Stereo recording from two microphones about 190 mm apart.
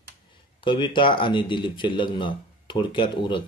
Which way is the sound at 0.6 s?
25° left (ahead or behind).